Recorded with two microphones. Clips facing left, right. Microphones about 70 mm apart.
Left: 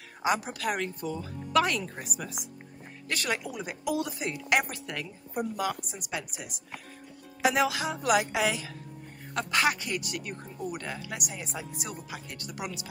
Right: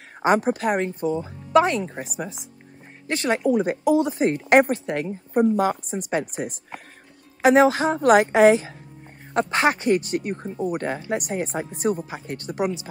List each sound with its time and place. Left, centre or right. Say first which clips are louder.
0.2 s speech: right 9 dB; right